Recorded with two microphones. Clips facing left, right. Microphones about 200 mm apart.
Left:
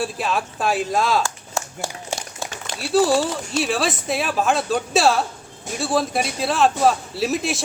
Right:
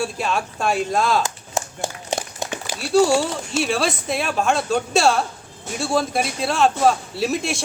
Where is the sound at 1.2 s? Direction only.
20° right (ahead or behind).